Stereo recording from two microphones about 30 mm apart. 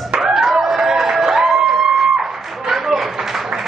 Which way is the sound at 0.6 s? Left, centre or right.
Centre.